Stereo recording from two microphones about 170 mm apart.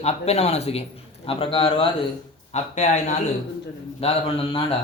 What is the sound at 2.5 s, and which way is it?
A man's voice, 40° left (ahead or behind).